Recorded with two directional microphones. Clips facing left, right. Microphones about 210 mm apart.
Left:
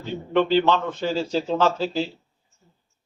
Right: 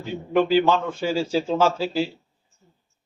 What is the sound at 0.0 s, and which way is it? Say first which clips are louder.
A man's voice: even; 10° right (ahead or behind).